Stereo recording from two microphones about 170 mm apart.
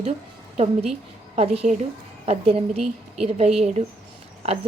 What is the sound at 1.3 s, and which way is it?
A woman's voice, 35° right (ahead or behind).